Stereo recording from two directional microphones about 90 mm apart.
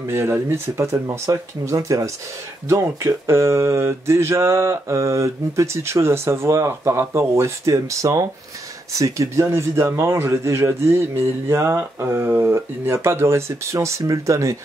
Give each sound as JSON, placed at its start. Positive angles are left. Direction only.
{"t": 0.1, "sound": "speech", "side_deg": -25}